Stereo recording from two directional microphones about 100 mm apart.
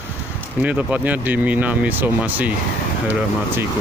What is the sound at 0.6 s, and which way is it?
Speech, 15° right (ahead or behind).